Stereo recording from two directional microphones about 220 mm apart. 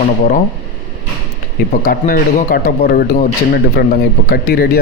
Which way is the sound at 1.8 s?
40° left (ahead or behind).